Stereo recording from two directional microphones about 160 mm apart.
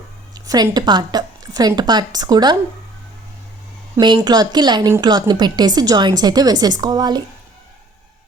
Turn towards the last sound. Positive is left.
turn(degrees=-25)  # may be behind; listen again after turning